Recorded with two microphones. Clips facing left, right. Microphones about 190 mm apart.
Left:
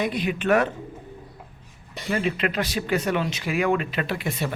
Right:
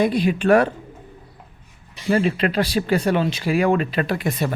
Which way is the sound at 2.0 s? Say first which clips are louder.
Right 5 dB; 35° right (ahead or behind).